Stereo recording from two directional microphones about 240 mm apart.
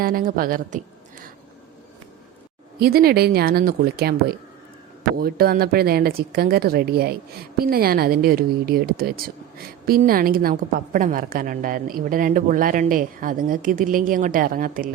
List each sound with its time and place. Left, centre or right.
0.0 s a woman's voice: right
2.7 s a woman's voice: right